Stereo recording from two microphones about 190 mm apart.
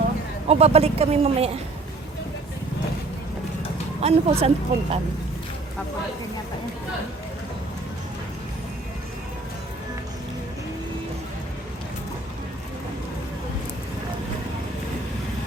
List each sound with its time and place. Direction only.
0.4 s speech: 35° right (ahead or behind)
4.0 s speech: 30° right (ahead or behind)